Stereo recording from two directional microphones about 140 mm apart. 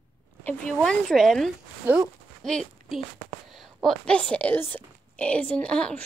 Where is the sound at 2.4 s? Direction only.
Centre (ahead or behind).